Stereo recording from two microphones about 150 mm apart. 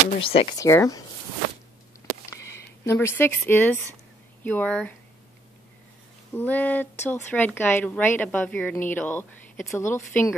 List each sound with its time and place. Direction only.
0.2 s speech: 40° left (ahead or behind)
0.6 s speech: 20° left (ahead or behind)
2.2 s a woman's voice: 20° left (ahead or behind)
6.3 s a woman's voice: 10° left (ahead or behind)